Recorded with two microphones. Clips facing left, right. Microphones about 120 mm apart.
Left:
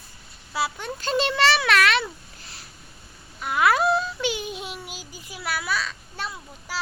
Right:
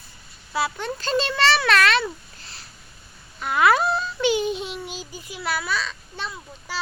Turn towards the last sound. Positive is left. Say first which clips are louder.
# right 1 dB
turn(degrees=5)  # may be behind; listen again after turning